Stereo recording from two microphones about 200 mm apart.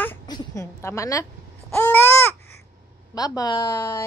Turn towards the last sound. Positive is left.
turn(degrees=15)  # may be behind; listen again after turning